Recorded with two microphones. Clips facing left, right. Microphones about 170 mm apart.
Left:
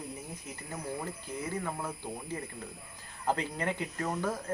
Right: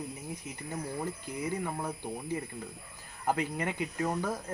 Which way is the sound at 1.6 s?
15° right (ahead or behind).